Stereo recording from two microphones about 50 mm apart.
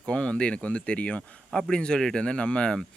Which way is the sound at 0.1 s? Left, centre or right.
Left.